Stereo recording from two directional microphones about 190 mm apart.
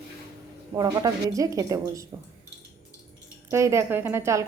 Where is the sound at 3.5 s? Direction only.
15° right (ahead or behind).